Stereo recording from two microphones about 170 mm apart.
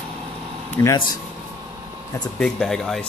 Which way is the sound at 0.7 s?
20° left (ahead or behind).